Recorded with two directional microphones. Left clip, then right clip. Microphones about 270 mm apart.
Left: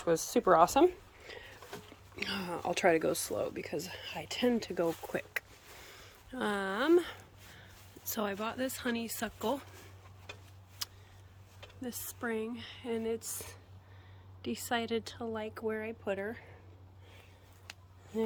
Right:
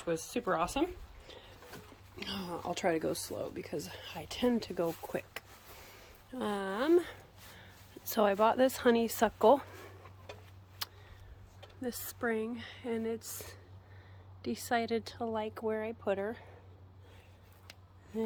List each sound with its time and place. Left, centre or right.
0.0 s speech: centre
1.3 s music: centre
2.1 s speech: centre
10.8 s a sound: centre
11.8 s speech: centre
18.1 s music: centre